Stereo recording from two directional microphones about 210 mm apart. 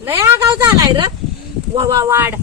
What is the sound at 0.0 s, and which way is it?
Speech, 10° right (ahead or behind).